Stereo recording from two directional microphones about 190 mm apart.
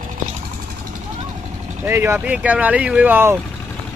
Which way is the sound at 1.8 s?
10° right (ahead or behind).